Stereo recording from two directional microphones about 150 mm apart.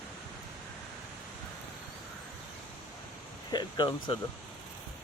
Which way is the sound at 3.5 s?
30° left (ahead or behind).